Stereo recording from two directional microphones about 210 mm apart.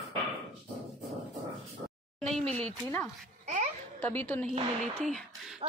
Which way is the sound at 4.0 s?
10° left (ahead or behind).